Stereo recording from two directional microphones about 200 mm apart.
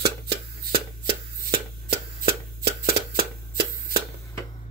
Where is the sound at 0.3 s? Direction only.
50° right (ahead or behind).